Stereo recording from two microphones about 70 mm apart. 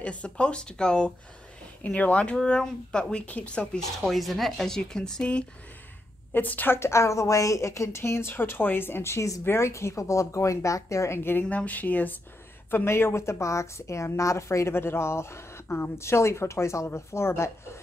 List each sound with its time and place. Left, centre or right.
0.0 s speech: centre
4.1 s speech: centre
6.3 s a woman's voice: left
11.4 s speech: left
12.7 s a woman's voice: left